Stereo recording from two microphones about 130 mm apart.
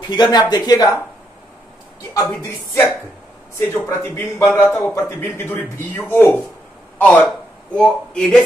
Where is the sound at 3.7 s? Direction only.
25° left (ahead or behind).